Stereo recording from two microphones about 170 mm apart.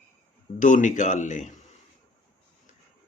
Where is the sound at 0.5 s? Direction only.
50° left (ahead or behind).